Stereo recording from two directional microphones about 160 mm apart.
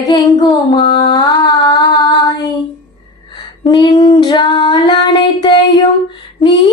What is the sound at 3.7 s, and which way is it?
Female singing, 25° left (ahead or behind).